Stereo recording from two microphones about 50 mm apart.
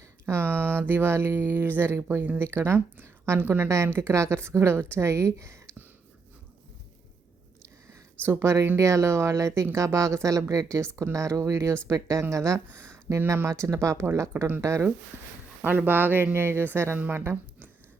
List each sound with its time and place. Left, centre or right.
0.0 s speech: right
2.6 s speech: right
3.8 s speech: right
4.1 s speech: right
8.3 s speech: right
8.8 s speech: right
12.8 s speech: right
15.6 s speech: right
17.0 s speech: right